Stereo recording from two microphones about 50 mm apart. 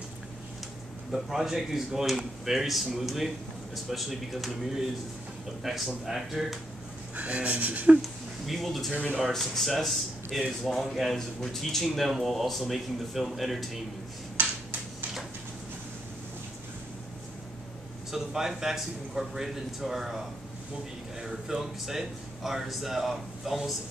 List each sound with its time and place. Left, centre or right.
1.1 s speech: centre
7.2 s speech: right
8.0 s a man's voice: centre
14.4 s a sound: right
18.1 s a man's voice: centre